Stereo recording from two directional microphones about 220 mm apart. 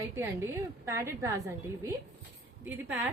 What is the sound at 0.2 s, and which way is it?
A woman's voice, 10° right (ahead or behind).